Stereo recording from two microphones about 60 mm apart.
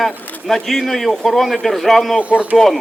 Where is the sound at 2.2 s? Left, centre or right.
Right.